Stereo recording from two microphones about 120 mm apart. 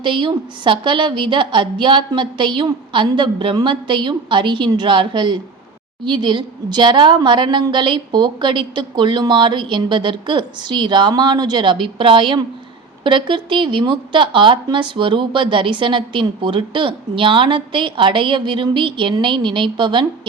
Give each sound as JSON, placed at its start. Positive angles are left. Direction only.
{"t": 0.0, "sound": "a woman's voice", "side_deg": -40}